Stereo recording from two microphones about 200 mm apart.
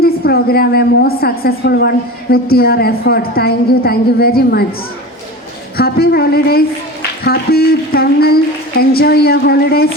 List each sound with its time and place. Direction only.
0.0 s a woman's voice: 50° left (ahead or behind)
5.7 s a woman's voice: 50° left (ahead or behind)